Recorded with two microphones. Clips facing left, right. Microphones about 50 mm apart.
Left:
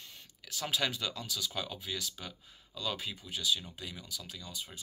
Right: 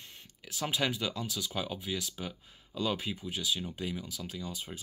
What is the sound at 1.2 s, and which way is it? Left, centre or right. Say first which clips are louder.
Speech: right 1 dB; right.